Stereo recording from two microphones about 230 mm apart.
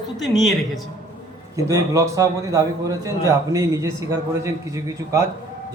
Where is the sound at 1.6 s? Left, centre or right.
Centre.